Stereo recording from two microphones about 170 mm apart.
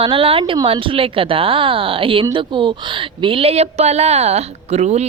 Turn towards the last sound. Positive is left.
turn(degrees=-40)  # may be behind; listen again after turning